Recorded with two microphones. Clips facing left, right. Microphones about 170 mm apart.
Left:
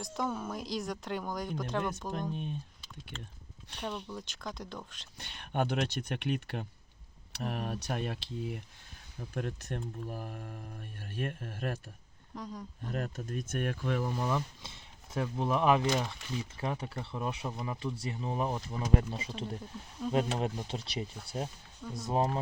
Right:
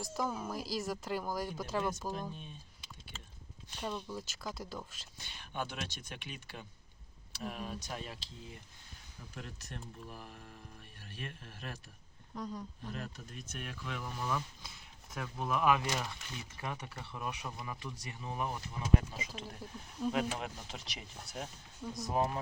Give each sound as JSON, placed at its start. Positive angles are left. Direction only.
{"t": 0.0, "sound": "speech", "side_deg": -5}
{"t": 2.3, "sound": "speech", "side_deg": 60}
{"t": 3.8, "sound": "speech", "side_deg": -5}
{"t": 5.1, "sound": "speech", "side_deg": 60}
{"t": 9.3, "sound": "speech", "side_deg": 55}
{"t": 12.3, "sound": "speech", "side_deg": 0}
{"t": 12.9, "sound": "speech", "side_deg": 50}
{"t": 14.1, "sound": "speech", "side_deg": 25}
{"t": 20.0, "sound": "speech", "side_deg": -5}
{"t": 20.4, "sound": "speech", "side_deg": 30}